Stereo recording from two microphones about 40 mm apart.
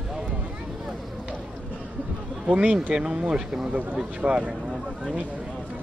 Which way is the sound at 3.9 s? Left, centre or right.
Right.